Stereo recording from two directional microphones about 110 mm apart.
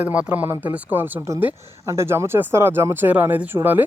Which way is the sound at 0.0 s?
10° right (ahead or behind).